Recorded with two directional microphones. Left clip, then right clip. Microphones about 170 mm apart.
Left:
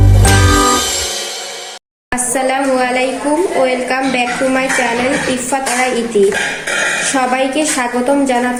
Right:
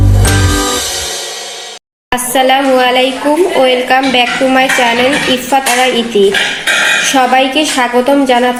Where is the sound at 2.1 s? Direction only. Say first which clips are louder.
Right 6 dB; 30° right (ahead or behind).